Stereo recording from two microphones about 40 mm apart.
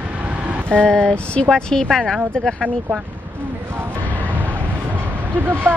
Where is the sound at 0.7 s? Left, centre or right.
Left.